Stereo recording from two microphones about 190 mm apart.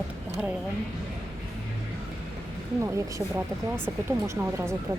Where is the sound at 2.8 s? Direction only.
15° right (ahead or behind).